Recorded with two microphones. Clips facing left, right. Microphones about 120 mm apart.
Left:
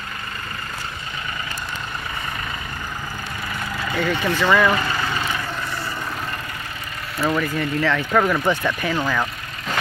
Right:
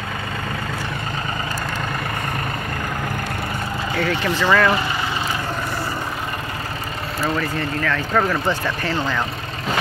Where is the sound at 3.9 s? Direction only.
Centre (ahead or behind).